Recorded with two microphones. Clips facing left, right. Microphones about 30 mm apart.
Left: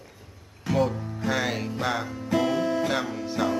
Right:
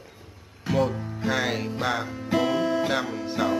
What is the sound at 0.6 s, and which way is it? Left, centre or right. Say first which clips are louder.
Music: even; centre.